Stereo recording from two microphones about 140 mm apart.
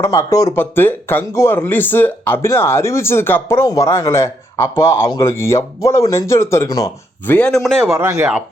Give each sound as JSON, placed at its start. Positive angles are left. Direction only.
{"t": 0.0, "sound": "speech", "side_deg": 20}
{"t": 7.6, "sound": "a man's voice", "side_deg": 0}
{"t": 7.9, "sound": "a man's voice", "side_deg": -15}